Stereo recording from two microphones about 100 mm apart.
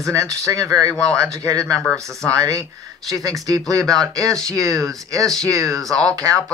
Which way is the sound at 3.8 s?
5° left (ahead or behind).